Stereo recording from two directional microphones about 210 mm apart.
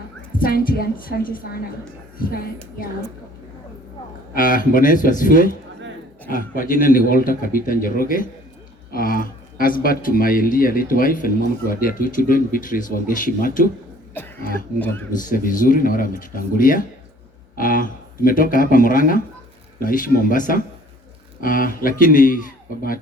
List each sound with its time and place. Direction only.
0.4 s speech: 45° left (ahead or behind)
4.4 s a man's voice: 40° left (ahead or behind)
14.8 s speech: 10° left (ahead or behind)
15.3 s a man's voice: 40° left (ahead or behind)